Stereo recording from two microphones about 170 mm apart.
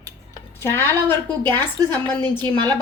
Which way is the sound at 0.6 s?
15° left (ahead or behind).